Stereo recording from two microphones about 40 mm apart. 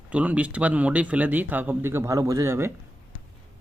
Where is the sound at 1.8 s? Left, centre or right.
Right.